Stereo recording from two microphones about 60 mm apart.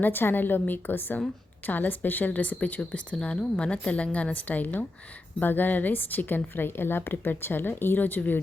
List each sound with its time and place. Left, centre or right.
0.0 s a woman's voice: left